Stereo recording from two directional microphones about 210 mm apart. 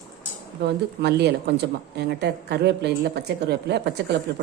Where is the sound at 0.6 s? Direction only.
55° right (ahead or behind).